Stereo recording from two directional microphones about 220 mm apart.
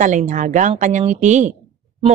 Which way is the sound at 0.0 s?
35° right (ahead or behind).